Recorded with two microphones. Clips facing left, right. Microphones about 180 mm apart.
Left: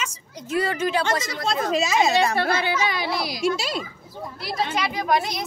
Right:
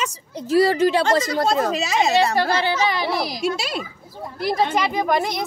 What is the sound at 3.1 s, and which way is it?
A woman's voice, 45° right (ahead or behind).